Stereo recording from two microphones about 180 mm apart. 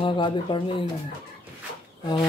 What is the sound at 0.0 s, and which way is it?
Speech, 30° left (ahead or behind).